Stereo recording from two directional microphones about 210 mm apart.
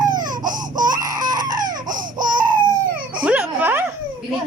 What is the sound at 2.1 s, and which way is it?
Baby cry, 40° right (ahead or behind).